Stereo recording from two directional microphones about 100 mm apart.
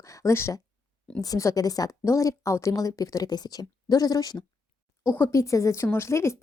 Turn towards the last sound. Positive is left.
turn(degrees=30)  # may be behind; listen again after turning